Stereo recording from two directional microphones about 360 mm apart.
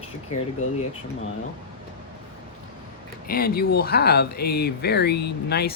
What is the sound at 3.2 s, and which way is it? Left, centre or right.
Speech, left.